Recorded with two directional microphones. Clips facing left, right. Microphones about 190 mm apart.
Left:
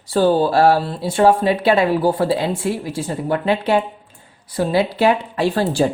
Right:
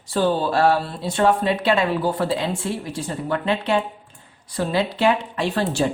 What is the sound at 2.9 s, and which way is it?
A woman's voice, 30° left (ahead or behind).